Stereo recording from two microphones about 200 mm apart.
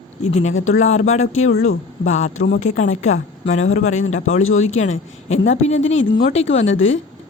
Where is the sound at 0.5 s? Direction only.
90° left.